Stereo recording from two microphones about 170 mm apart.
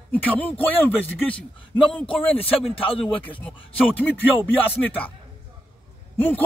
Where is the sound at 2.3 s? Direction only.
35° left (ahead or behind).